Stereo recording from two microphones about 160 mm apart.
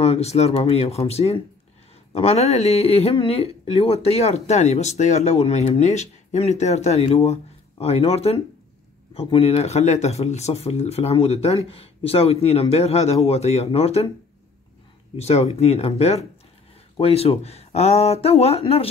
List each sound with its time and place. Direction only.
0.0 s speech: 40° left (ahead or behind)
15.1 s speech: 40° left (ahead or behind)